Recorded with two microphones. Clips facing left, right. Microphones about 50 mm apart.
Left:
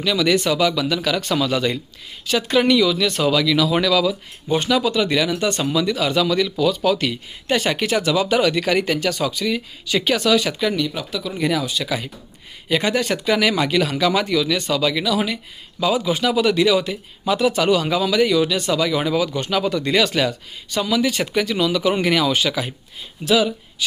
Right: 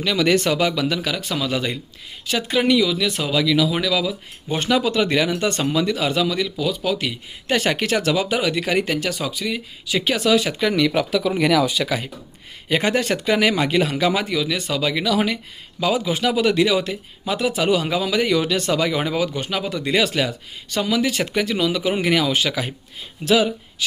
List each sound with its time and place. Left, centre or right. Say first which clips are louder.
0.0 s speech: even; right
1.1 s speech: left 3 dB; centre
4.6 s speech: right 2 dB; right
6.1 s speech: left 3 dB; centre
7.4 s speech: even; right
8.4 s speech: left 3 dB; centre
10.9 s speech: right 7 dB; right
11.8 s speech: right 2 dB; right
15.0 s speech: right 1 dB; right
19.4 s speech: left 4 dB; centre
20.7 s speech: left 1 dB; right